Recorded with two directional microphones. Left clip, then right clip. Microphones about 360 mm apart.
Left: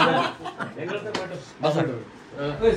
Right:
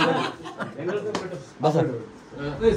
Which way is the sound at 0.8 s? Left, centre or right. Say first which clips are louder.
Right 3 dB; right.